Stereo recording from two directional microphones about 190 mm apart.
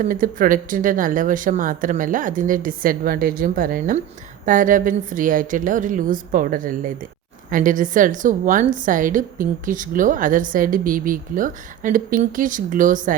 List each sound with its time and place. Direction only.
0.0 s a woman's voice: 45° right (ahead or behind)